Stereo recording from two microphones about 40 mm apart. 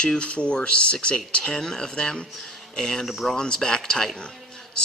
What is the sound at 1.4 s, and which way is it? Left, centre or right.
Speech, centre.